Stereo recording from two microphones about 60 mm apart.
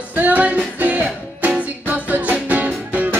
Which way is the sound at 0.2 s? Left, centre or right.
Right.